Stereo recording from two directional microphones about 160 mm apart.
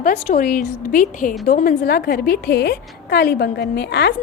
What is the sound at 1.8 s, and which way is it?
A woman's voice, 80° left.